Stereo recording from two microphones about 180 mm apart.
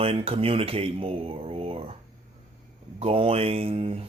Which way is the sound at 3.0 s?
30° right (ahead or behind).